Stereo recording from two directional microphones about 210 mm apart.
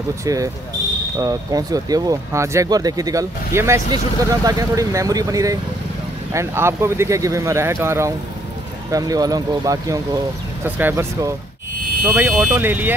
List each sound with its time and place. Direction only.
0.2 s speech: 15° right (ahead or behind)